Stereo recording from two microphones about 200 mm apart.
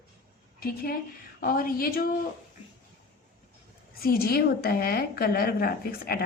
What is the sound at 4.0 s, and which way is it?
A woman's voice, 50° left (ahead or behind).